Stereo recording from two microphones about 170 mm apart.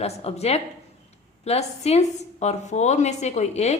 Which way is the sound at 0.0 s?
35° left (ahead or behind).